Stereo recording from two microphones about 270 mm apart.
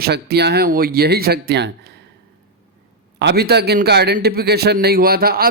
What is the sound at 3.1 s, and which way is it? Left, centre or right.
A man's voice, right.